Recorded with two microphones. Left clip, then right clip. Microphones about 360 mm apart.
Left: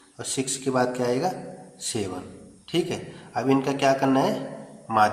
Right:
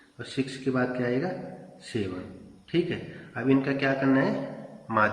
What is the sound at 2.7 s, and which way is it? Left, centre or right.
A man's voice, centre.